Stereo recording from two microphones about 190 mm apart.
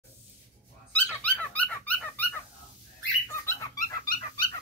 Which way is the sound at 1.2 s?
10° left (ahead or behind).